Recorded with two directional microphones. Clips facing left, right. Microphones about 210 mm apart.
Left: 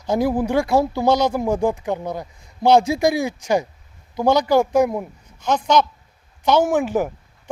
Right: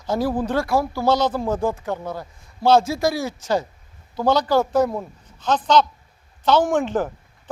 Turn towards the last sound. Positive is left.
turn(degrees=10)  # may be behind; listen again after turning